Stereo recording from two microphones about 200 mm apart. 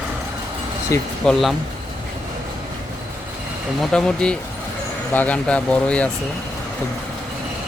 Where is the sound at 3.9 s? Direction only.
5° left (ahead or behind).